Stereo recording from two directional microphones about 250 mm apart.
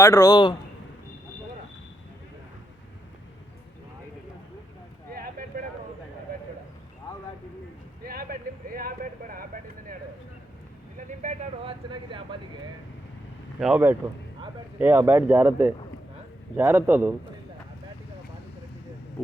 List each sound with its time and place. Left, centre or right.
0.0 s a man's voice: centre
5.1 s vehicle: right
8.0 s vehicle: right
10.9 s vehicle: right
13.6 s speech: centre